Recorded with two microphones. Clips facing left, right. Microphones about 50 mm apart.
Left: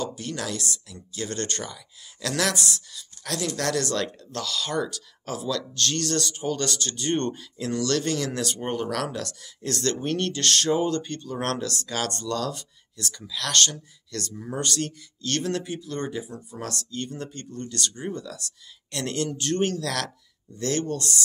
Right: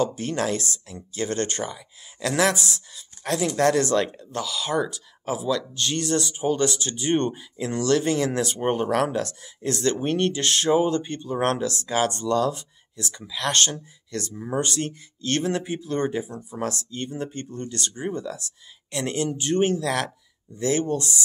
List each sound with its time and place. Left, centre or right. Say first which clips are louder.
0.0 s a woman's voice: right 6 dB; right